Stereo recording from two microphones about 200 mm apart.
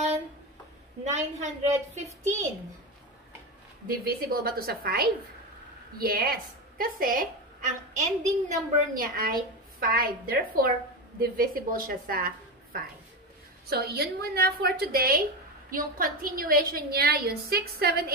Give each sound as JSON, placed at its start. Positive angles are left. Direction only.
{"t": 1.0, "sound": "a woman's voice", "side_deg": -35}
{"t": 3.8, "sound": "a woman's voice", "side_deg": -45}
{"t": 13.7, "sound": "a woman's voice", "side_deg": -50}